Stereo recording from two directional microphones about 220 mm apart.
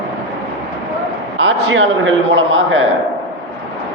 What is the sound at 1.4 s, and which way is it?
A man's voice, 55° right (ahead or behind).